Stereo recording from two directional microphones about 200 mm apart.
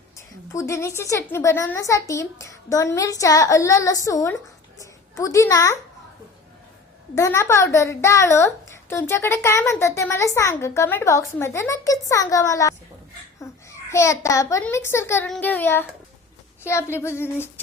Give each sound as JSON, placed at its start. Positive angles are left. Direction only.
{"t": 0.2, "sound": "a woman's voice", "side_deg": 15}
{"t": 7.2, "sound": "a woman's voice", "side_deg": 15}